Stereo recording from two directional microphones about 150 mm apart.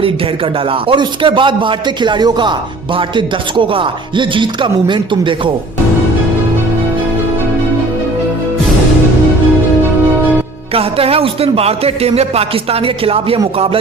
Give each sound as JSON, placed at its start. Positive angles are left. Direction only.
{"t": 0.9, "sound": "speech", "side_deg": -35}
{"t": 10.8, "sound": "speech", "side_deg": -40}